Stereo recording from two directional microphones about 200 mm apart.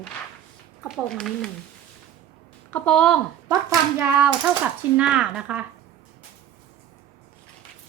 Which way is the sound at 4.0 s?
5° right (ahead or behind).